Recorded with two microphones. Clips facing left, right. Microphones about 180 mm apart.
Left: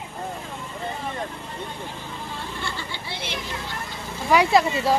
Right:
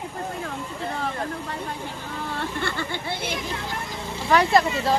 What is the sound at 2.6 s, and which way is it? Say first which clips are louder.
Speech: right 5 dB; 50° right (ahead or behind).